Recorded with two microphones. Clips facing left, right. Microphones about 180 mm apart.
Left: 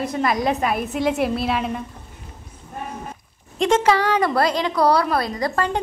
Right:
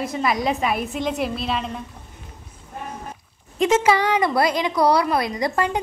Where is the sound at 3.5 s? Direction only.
5° right (ahead or behind).